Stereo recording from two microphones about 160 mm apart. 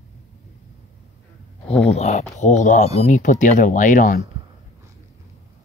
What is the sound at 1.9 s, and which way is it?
Speech, 45° left (ahead or behind).